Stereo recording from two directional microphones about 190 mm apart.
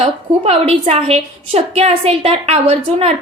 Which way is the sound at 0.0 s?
30° right (ahead or behind).